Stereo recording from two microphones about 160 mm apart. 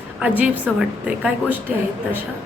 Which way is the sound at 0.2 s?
10° right (ahead or behind).